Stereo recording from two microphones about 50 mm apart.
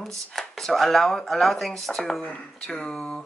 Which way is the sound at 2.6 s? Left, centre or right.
Centre.